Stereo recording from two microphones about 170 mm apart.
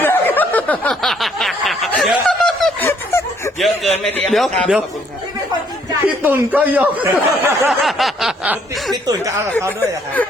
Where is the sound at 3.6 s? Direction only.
Centre (ahead or behind).